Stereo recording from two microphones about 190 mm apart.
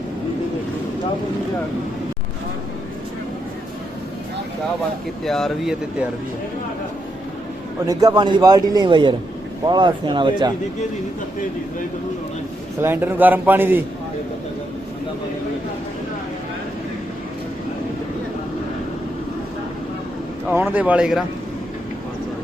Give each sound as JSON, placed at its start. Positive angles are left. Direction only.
{"t": 5.2, "sound": "speech", "side_deg": 0}
{"t": 7.9, "sound": "a man's voice", "side_deg": -20}
{"t": 12.8, "sound": "a man's voice", "side_deg": -10}
{"t": 20.5, "sound": "a man's voice", "side_deg": -10}